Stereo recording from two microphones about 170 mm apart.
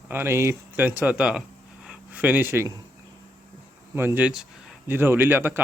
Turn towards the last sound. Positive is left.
turn(degrees=-10)  # may be behind; listen again after turning